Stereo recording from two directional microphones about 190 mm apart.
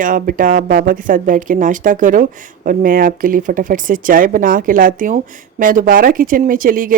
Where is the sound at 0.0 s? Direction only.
45° right (ahead or behind).